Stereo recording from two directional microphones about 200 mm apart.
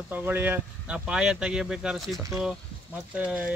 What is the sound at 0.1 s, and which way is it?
Speech, 10° right (ahead or behind).